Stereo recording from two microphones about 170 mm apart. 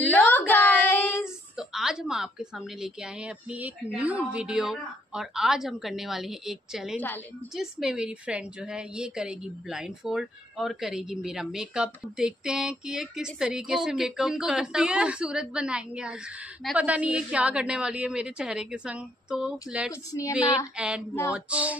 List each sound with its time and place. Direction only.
0.1 s a sound: 10° left (ahead or behind)
0.5 s child singing: 10° left (ahead or behind)
1.2 s a woman's voice: 5° right (ahead or behind)
19.9 s speech: 20° left (ahead or behind)
20.3 s a woman's voice: 5° right (ahead or behind)